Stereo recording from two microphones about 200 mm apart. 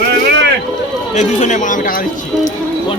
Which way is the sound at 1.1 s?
35° left (ahead or behind).